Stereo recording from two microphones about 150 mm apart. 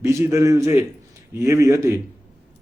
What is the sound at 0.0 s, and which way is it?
A man's voice, 20° right (ahead or behind).